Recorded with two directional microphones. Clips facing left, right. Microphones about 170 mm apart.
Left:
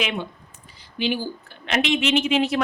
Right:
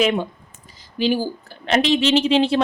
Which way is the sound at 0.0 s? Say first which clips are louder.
Right 8 dB; 45° right (ahead or behind).